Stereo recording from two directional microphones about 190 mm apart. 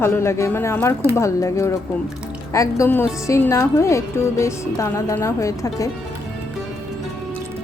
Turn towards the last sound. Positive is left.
turn(degrees=15)  # may be behind; listen again after turning